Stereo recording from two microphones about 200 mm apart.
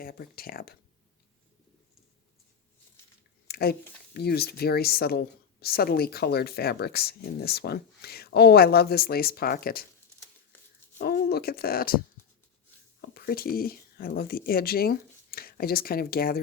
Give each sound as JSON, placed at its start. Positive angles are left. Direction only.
{"t": 0.0, "sound": "speech", "side_deg": 50}
{"t": 3.4, "sound": "speech", "side_deg": 50}
{"t": 10.9, "sound": "speech", "side_deg": 50}
{"t": 13.0, "sound": "speech", "side_deg": 50}